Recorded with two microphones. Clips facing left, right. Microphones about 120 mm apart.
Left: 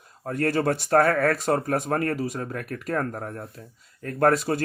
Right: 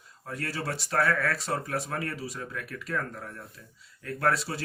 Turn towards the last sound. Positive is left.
turn(degrees=50)  # may be behind; listen again after turning